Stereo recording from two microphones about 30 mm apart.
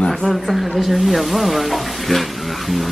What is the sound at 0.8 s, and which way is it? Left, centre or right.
Speech, centre.